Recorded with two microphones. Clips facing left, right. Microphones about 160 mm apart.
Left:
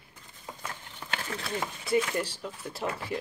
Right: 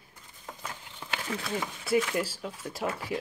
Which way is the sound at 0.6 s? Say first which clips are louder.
Even; 10° right (ahead or behind).